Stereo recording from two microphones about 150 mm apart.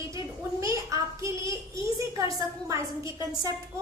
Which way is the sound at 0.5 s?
20° right (ahead or behind).